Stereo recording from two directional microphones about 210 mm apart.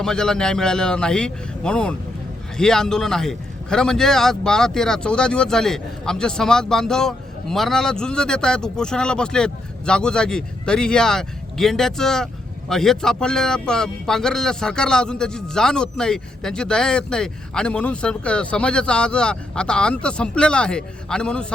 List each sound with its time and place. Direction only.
0.0 s a man's voice: 5° left (ahead or behind)